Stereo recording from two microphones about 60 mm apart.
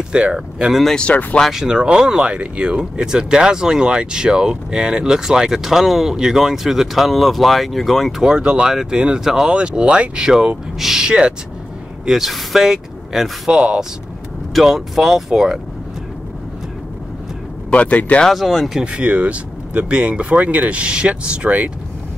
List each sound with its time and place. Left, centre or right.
0.1 s speech: centre
0.9 s speech: centre
1.5 s speech: centre
8.2 s speech: centre
12.1 s speech: centre
17.6 s speech: left
18.2 s speech: centre
18.8 s speech: centre